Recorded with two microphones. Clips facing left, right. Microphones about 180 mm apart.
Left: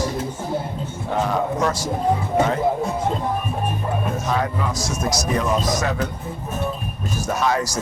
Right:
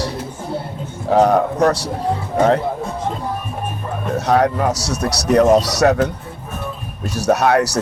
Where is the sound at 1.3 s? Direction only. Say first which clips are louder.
Right 6 dB; 65° right (ahead or behind).